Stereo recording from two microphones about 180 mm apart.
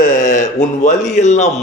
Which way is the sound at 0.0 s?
45° left (ahead or behind).